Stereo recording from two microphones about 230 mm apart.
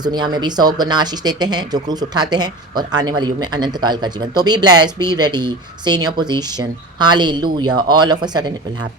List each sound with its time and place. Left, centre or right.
0.0 s speech: centre